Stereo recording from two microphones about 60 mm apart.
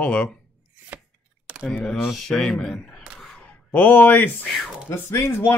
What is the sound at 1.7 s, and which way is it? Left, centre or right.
Speech, centre.